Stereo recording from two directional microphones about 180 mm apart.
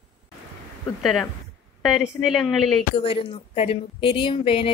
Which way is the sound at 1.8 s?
Centre (ahead or behind).